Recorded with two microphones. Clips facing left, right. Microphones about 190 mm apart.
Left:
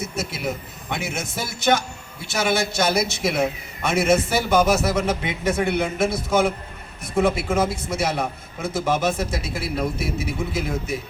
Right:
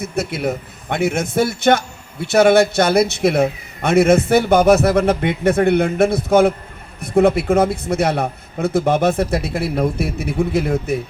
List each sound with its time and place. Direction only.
0.2 s a man's voice: 55° right (ahead or behind)